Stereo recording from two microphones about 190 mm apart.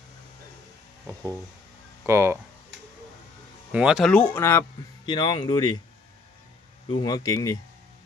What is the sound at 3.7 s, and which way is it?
Speech, 5° right (ahead or behind).